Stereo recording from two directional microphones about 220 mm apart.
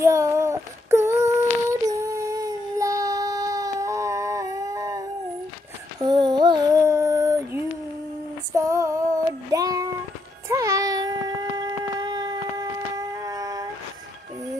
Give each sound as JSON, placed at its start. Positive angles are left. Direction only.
{"t": 0.0, "sound": "child singing", "side_deg": -15}
{"t": 1.9, "sound": "a sound", "side_deg": -15}
{"t": 6.0, "sound": "child singing", "side_deg": -20}
{"t": 8.5, "sound": "female singing", "side_deg": -15}
{"t": 10.5, "sound": "child singing", "side_deg": -15}